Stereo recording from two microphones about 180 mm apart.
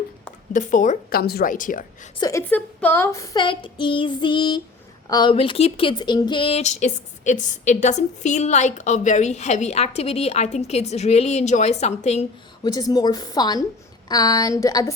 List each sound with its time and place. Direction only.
0.5 s a woman's voice: 45° left (ahead or behind)
1.2 s a woman's voice: 60° left (ahead or behind)
2.1 s child singing: 20° left (ahead or behind)
5.0 s speech: 20° left (ahead or behind); by 12.2 s 40° left (ahead or behind)
12.6 s child singing: 20° left (ahead or behind)